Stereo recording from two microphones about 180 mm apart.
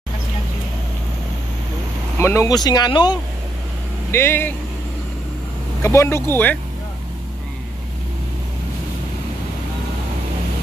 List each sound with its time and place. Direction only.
2.1 s speech: 15° left (ahead or behind)
4.1 s speech: 15° left (ahead or behind)
5.8 s speech: 15° left (ahead or behind)